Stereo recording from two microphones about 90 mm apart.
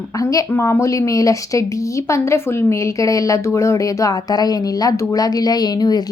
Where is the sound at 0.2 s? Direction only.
40° left (ahead or behind).